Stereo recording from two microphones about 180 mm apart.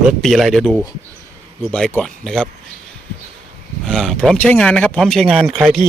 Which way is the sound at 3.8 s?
Centre (ahead or behind).